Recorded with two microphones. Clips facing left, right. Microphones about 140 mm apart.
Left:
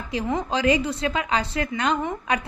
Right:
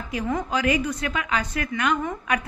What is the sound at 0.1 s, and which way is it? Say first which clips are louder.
A woman's voice: left 1 dB; 25° left (ahead or behind).